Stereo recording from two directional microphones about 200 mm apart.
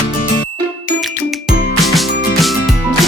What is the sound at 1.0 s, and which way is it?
Music, centre (ahead or behind).